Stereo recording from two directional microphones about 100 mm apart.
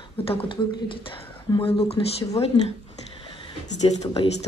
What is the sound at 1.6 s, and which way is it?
Speech, 80° left.